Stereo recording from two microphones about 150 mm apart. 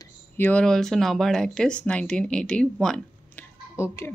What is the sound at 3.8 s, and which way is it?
Speech, 20° left (ahead or behind).